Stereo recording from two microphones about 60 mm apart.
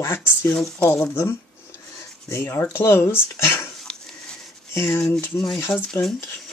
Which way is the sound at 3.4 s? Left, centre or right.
Left.